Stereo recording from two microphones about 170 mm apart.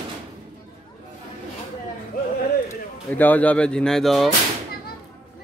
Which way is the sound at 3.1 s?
10° left (ahead or behind).